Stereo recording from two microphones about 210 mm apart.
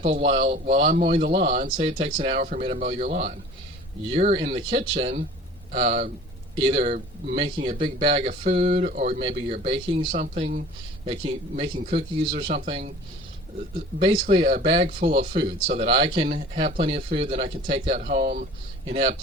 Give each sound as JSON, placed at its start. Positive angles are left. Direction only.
{"t": 0.0, "sound": "speech", "side_deg": -30}
{"t": 1.7, "sound": "speech", "side_deg": -25}
{"t": 9.2, "sound": "speech", "side_deg": -25}
{"t": 14.0, "sound": "speech", "side_deg": -30}